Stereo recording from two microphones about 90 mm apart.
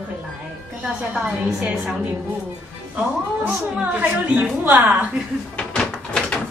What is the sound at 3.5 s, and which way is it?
A woman's voice, 15° right (ahead or behind).